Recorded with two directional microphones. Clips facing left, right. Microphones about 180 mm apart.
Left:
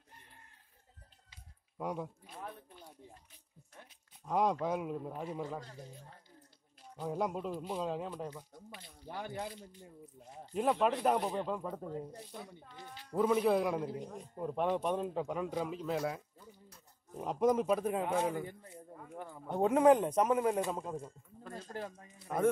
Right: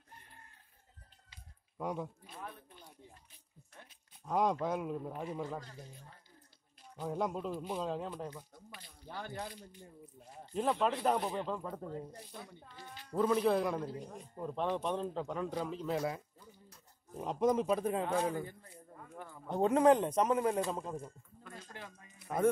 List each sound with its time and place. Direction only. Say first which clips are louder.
1.8 s speech: even; centre (ahead or behind)
3.7 s speech: left 1 dB; centre (ahead or behind)
7.0 s speech: even; 5° left (ahead or behind)
8.6 s speech: left 3 dB; 25° left (ahead or behind)
9.4 s speech: left 2 dB; 25° left (ahead or behind)
10.5 s speech: left 2 dB; 5° left (ahead or behind)
18.0 s speech: even; 20° left (ahead or behind)
21.4 s a sound: left 7 dB; 35° left (ahead or behind)